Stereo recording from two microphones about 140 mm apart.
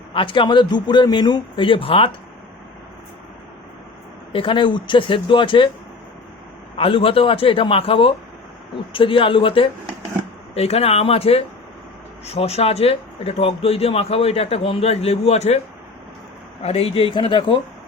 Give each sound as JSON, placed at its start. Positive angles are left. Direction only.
{"t": 0.1, "sound": "a man's voice", "side_deg": 40}
{"t": 4.3, "sound": "a man's voice", "side_deg": 40}
{"t": 6.7, "sound": "a man's voice", "side_deg": 40}
{"t": 16.6, "sound": "a man's voice", "side_deg": 45}